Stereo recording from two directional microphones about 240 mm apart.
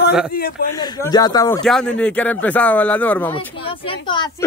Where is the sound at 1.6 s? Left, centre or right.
Centre.